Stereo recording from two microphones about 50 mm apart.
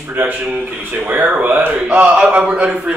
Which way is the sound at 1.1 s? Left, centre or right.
Right.